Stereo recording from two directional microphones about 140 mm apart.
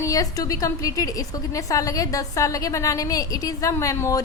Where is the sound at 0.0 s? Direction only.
25° left (ahead or behind).